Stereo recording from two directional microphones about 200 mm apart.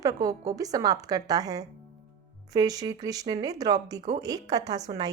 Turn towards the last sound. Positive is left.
turn(degrees=-20)  # may be behind; listen again after turning